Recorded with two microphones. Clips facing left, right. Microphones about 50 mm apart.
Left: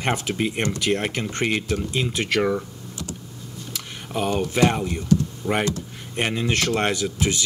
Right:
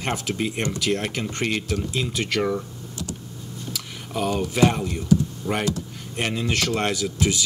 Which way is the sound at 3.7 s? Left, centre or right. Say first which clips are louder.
Left 1 dB; centre.